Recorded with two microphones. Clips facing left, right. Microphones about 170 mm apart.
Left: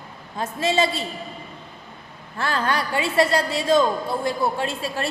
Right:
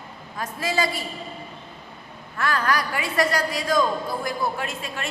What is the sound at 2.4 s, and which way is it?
A woman's voice, 30° left (ahead or behind).